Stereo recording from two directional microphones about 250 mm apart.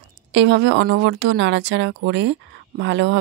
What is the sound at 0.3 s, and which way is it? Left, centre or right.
Speech, right.